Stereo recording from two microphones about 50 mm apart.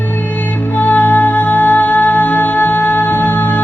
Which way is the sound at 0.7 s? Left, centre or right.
Left.